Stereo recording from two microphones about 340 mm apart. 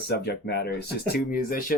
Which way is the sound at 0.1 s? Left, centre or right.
Left.